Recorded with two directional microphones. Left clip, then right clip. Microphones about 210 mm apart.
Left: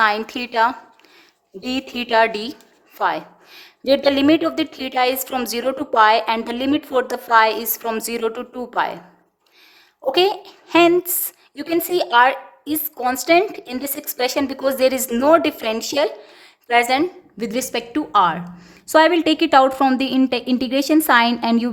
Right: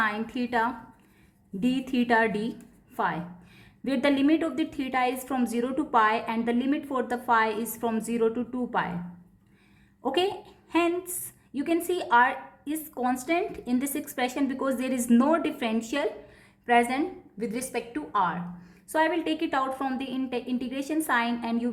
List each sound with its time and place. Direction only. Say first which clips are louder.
0.0 s a woman's voice: left 10 dB; 45° left (ahead or behind)
10.1 s a woman's voice: left 10 dB; 40° left (ahead or behind)